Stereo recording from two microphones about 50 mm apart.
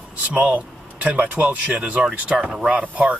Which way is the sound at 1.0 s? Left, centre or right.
Right.